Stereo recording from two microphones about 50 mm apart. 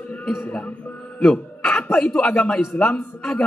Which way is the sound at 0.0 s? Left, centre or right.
Centre.